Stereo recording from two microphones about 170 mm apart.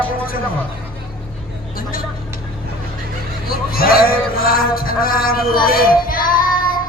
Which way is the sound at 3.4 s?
60° left (ahead or behind).